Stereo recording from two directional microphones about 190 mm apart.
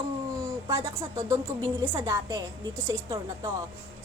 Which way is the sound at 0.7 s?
15° right (ahead or behind).